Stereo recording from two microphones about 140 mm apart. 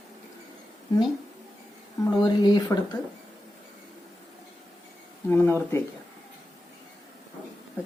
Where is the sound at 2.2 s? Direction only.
30° left (ahead or behind).